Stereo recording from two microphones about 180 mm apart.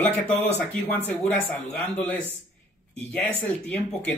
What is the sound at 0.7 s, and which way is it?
Speech, 10° left (ahead or behind).